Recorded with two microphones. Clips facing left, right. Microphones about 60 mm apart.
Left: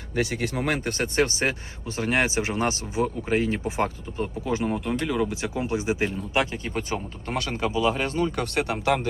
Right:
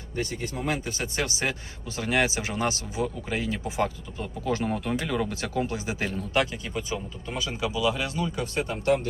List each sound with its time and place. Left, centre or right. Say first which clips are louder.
0.1 s speech: left 5 dB; left
4.4 s speech: even; centre
5.6 s speech: left 5 dB; left
6.7 s speech: left 1 dB; left
8.4 s speech: left 3 dB; left